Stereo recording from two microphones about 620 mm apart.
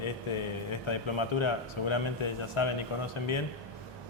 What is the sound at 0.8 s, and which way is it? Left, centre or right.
A man's voice, left.